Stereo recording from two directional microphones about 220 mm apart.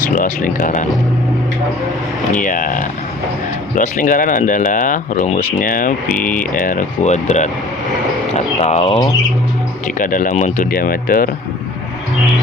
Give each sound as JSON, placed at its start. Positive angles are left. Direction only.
{"t": 0.0, "sound": "speech", "side_deg": 40}
{"t": 2.3, "sound": "speech", "side_deg": 35}
{"t": 8.3, "sound": "bird", "side_deg": 30}
{"t": 9.8, "sound": "speech", "side_deg": 35}